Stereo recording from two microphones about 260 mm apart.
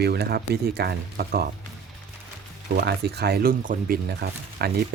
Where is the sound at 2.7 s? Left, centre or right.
Right.